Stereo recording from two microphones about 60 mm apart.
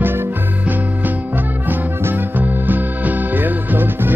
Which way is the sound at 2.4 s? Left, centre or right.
Right.